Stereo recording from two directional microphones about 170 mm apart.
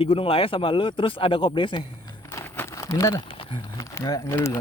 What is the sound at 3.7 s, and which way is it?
Speech, 20° left (ahead or behind).